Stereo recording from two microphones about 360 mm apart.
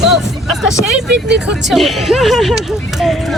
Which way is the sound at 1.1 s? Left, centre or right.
Right.